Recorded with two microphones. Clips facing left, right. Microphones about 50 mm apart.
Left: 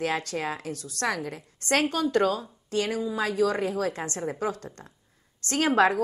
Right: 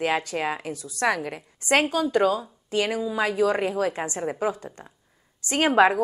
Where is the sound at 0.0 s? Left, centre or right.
Right.